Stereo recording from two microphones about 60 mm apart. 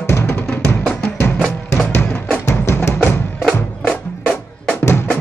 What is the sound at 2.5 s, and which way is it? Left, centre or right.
Music, left.